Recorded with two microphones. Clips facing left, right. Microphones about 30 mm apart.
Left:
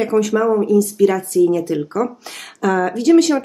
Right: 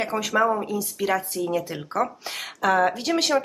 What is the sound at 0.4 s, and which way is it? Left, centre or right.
Speech, centre.